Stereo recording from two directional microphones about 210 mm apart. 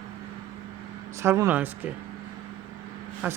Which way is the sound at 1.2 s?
10° right (ahead or behind).